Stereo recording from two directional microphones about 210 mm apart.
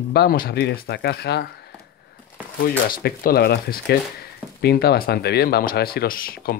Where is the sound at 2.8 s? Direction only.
45° left (ahead or behind).